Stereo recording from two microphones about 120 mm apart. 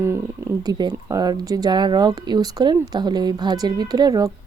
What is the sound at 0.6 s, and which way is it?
A woman's voice, 35° right (ahead or behind).